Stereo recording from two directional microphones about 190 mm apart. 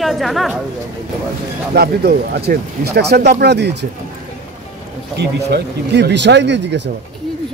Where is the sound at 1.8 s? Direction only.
55° right (ahead or behind).